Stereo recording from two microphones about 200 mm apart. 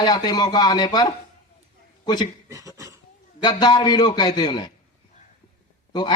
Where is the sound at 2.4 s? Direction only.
15° right (ahead or behind).